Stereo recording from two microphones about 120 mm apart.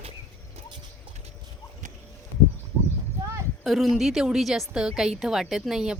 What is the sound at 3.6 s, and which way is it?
A woman's voice, centre (ahead or behind).